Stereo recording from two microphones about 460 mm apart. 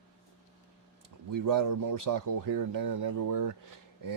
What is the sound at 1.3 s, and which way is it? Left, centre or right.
Speech, right.